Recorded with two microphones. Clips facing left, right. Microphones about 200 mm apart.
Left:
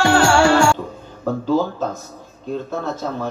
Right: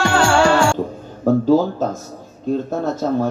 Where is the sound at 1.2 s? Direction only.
40° right (ahead or behind).